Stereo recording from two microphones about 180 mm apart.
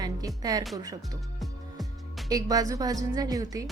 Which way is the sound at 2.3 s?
20° right (ahead or behind).